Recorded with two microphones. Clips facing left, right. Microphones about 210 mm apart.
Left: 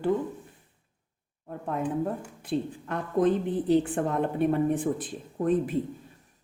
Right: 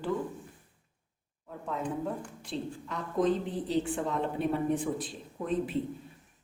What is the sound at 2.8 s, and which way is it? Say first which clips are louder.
A woman's voice: left 3 dB; 55° left (ahead or behind).